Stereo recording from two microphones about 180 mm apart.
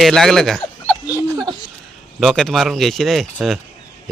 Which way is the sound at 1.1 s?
20° right (ahead or behind).